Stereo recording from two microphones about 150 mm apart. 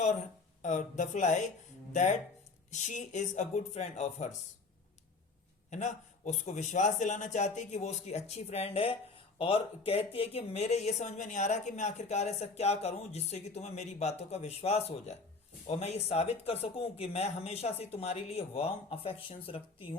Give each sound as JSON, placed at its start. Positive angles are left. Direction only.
{"t": 0.6, "sound": "a man's voice", "side_deg": 55}
{"t": 5.7, "sound": "a man's voice", "side_deg": 55}